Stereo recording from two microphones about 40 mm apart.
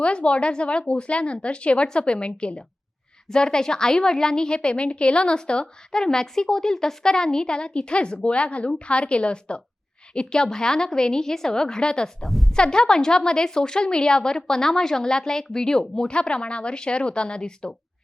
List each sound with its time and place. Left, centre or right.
0.0 s a woman's voice: left
12.2 s a woman's voice: centre
12.5 s a woman's voice: left